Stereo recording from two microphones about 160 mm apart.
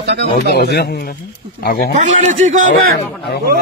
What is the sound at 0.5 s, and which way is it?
Speech, 90° left.